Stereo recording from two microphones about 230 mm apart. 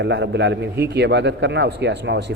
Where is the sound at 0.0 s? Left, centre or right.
Right.